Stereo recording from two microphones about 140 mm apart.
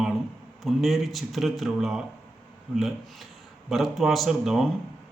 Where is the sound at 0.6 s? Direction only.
Centre (ahead or behind).